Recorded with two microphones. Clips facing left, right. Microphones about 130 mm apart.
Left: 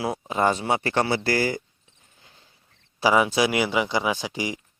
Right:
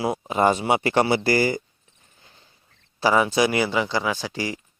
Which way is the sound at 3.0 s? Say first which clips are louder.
Right 1 dB; 10° left (ahead or behind).